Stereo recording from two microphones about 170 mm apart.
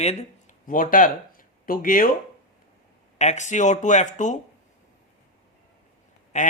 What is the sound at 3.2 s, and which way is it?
Speech, 45° left (ahead or behind).